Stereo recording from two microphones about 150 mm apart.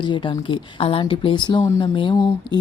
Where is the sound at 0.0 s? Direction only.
30° left (ahead or behind).